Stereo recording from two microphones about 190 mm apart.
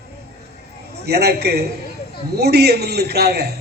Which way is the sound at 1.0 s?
60° right (ahead or behind).